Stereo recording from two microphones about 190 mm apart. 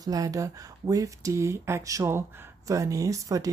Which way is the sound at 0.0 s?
20° right (ahead or behind).